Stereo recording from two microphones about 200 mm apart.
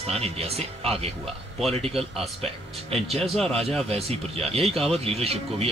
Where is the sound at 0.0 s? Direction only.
30° right (ahead or behind).